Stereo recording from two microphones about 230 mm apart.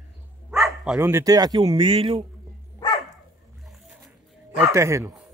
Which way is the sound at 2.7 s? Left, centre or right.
Centre.